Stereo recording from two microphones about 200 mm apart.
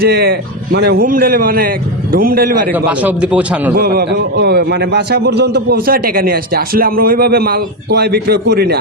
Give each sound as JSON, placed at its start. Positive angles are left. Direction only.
{"t": 0.0, "sound": "a man's voice", "side_deg": -50}
{"t": 2.7, "sound": "a man's voice", "side_deg": -10}
{"t": 3.8, "sound": "a man's voice", "side_deg": -50}